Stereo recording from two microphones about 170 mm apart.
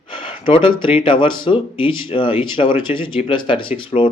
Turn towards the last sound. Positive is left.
turn(degrees=30)  # may be behind; listen again after turning